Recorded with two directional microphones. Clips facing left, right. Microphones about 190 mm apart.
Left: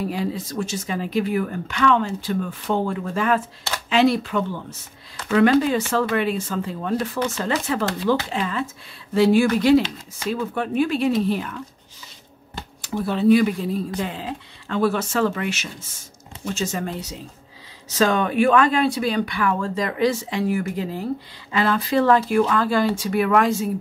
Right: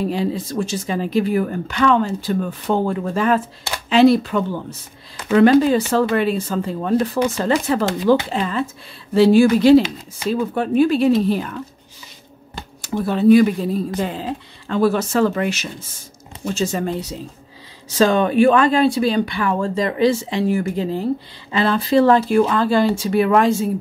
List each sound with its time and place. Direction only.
0.0 s speech: 30° right (ahead or behind)
9.8 s speech: 10° right (ahead or behind)
10.3 s speech: 35° right (ahead or behind)
12.8 s speech: 45° right (ahead or behind); by 23.7 s 30° right (ahead or behind)